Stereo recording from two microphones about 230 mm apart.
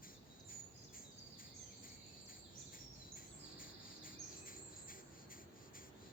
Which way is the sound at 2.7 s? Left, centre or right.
Left.